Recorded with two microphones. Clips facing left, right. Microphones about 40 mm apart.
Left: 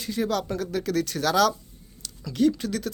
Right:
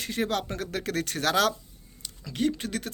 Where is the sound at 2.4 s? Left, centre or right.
Right.